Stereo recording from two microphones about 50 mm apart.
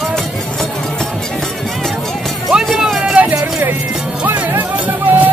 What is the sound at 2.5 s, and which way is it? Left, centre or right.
Music, centre.